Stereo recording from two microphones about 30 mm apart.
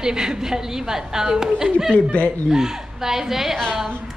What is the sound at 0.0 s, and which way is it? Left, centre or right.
A woman's voice, right.